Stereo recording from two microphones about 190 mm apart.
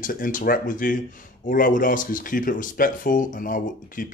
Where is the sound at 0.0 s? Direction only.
45° left (ahead or behind).